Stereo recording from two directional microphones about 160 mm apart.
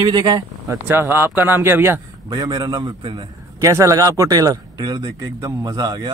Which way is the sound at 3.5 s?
20° right (ahead or behind).